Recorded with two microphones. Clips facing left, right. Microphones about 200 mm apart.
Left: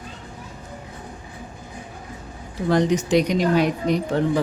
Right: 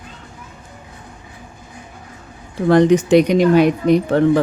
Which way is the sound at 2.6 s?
60° right (ahead or behind).